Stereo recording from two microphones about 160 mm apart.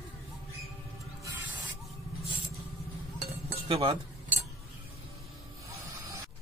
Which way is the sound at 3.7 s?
35° right (ahead or behind).